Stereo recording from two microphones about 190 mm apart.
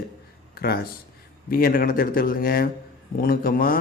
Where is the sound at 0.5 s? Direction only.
55° left (ahead or behind).